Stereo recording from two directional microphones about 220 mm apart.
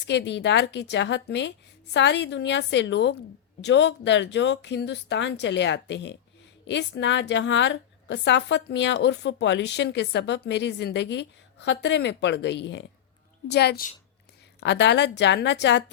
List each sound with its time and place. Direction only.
0.1 s a woman's voice: 55° left (ahead or behind)